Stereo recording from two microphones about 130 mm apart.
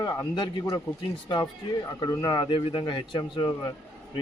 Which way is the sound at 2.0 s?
30° left (ahead or behind).